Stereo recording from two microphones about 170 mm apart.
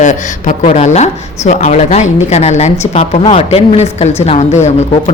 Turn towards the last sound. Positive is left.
turn(degrees=40)  # may be behind; listen again after turning